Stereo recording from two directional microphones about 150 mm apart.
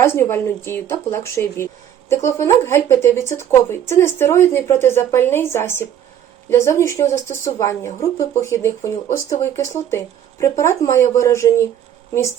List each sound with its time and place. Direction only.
0.0 s speech: 15° left (ahead or behind)